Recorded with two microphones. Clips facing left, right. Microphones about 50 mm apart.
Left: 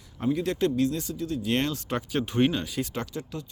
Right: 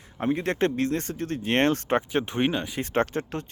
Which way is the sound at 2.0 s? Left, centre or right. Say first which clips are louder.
Even; right.